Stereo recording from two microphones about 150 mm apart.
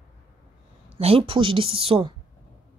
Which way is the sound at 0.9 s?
40° right (ahead or behind).